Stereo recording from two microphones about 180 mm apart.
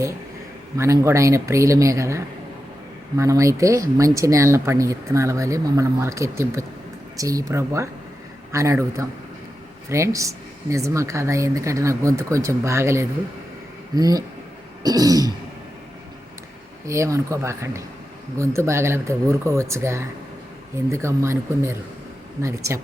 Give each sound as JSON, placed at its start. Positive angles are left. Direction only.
{"t": 0.8, "sound": "speech", "side_deg": -15}
{"t": 16.8, "sound": "speech", "side_deg": -15}